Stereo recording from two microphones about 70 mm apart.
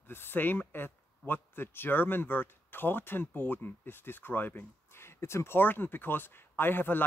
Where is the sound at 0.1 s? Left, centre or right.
Left.